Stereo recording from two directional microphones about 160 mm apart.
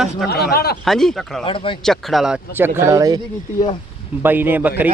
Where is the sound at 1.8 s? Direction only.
Centre (ahead or behind); by 3.2 s 20° right (ahead or behind).